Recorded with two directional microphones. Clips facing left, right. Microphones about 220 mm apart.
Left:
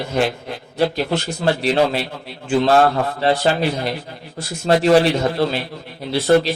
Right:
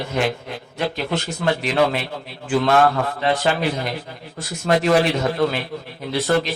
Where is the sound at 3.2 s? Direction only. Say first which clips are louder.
Left 3 dB; 30° left (ahead or behind).